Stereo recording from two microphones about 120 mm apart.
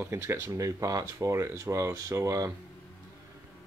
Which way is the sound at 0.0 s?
20° right (ahead or behind).